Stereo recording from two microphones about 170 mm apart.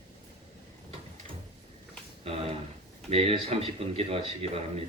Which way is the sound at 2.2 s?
35° right (ahead or behind).